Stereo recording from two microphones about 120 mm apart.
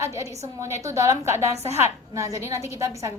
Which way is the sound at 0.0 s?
25° right (ahead or behind).